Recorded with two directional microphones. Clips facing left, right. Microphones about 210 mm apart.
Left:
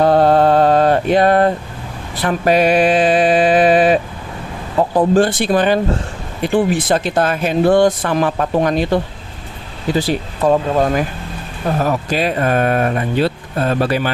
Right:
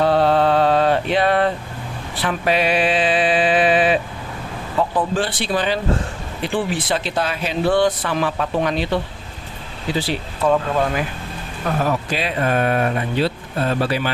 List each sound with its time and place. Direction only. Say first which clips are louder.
0.0 s mantra: left 4 dB; 45° left (ahead or behind)
2.2 s speech: left 6 dB; 45° left (ahead or behind)